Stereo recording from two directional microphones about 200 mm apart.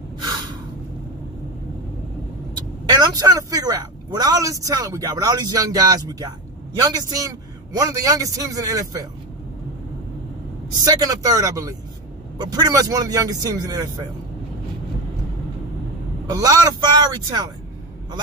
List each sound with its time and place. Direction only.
0.2 s gasp: 20° right (ahead or behind)
2.9 s speech: 20° right (ahead or behind)
10.8 s speech: 20° right (ahead or behind)
16.3 s speech: 20° right (ahead or behind)